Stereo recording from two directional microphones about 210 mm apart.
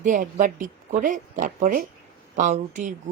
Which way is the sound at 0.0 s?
40° right (ahead or behind).